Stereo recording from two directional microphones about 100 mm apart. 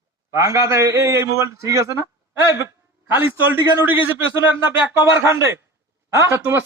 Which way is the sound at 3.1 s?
20° right (ahead or behind).